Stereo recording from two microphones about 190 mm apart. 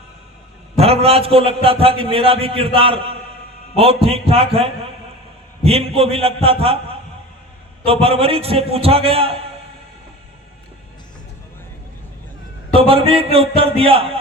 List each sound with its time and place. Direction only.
0.8 s a man's voice: 30° right (ahead or behind)
12.7 s a man's voice: 30° right (ahead or behind)